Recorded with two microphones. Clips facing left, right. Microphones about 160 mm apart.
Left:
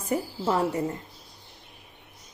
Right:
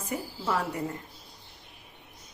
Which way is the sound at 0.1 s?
45° left (ahead or behind).